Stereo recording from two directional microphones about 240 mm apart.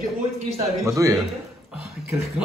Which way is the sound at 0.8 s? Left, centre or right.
Centre.